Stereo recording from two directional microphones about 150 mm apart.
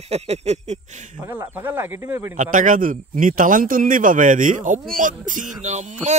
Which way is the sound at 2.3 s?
60° right (ahead or behind).